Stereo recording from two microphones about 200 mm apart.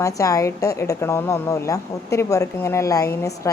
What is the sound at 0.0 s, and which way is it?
A woman's voice, 15° left (ahead or behind).